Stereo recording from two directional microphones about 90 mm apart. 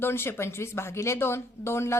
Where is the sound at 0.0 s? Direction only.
25° left (ahead or behind).